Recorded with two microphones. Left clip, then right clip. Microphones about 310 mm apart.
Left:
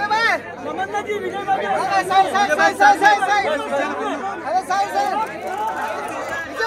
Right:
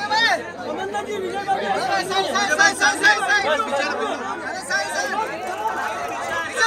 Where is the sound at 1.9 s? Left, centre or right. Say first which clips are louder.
Left 5 dB; centre.